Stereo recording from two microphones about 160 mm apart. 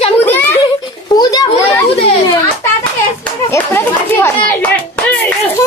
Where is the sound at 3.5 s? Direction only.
15° left (ahead or behind).